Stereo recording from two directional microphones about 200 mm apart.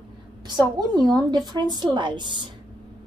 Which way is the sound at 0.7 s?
20° right (ahead or behind).